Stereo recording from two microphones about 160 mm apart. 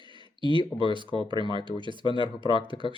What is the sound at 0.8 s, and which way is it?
Speech, 30° right (ahead or behind).